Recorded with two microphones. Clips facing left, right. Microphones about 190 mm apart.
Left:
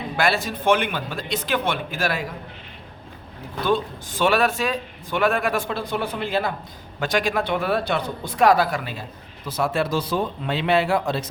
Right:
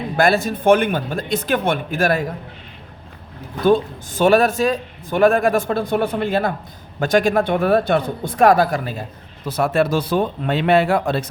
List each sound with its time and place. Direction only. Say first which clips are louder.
0.2 s a man's voice: right 6 dB; 50° right (ahead or behind)
3.6 s a man's voice: right 7 dB; 45° right (ahead or behind)
9.5 s speech: right 5 dB; 60° right (ahead or behind)